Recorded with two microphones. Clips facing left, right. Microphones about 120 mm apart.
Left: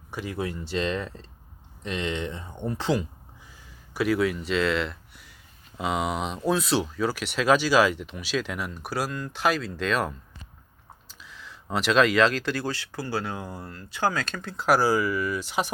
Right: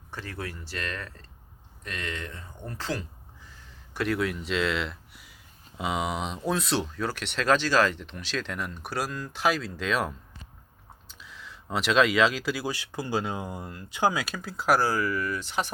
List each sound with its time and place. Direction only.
0.1 s speech: 15° left (ahead or behind)